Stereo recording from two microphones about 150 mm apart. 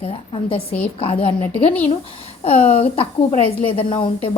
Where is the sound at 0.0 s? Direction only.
40° left (ahead or behind).